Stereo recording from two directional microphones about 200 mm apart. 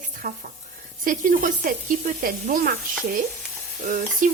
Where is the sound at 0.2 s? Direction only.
45° right (ahead or behind).